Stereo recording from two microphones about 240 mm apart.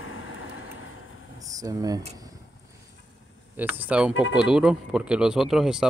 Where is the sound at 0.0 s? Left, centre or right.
Left.